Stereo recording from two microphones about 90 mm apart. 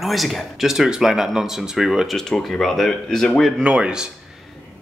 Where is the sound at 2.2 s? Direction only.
5° left (ahead or behind).